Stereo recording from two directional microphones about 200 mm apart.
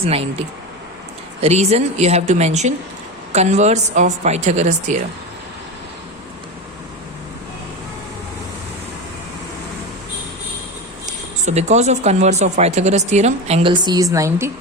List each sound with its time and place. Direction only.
0.0 s speech: 30° right (ahead or behind)
11.0 s speech: 35° right (ahead or behind); by 14.5 s 15° right (ahead or behind)